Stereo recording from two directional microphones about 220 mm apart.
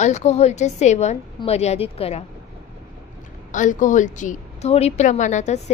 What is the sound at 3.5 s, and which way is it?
A woman's voice, 35° left (ahead or behind).